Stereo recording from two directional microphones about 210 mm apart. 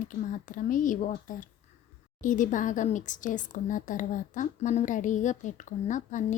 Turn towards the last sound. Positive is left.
turn(degrees=35)  # may be behind; listen again after turning